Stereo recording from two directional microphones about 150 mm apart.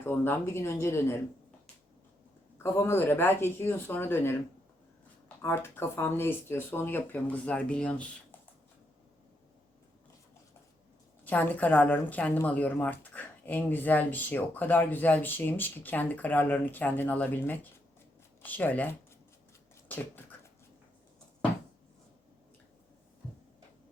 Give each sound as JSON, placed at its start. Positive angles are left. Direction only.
{"t": 0.0, "sound": "speech", "side_deg": 15}
{"t": 2.6, "sound": "speech", "side_deg": 15}
{"t": 5.4, "sound": "speech", "side_deg": 15}
{"t": 11.3, "sound": "speech", "side_deg": 10}
{"t": 19.9, "sound": "a sound", "side_deg": 10}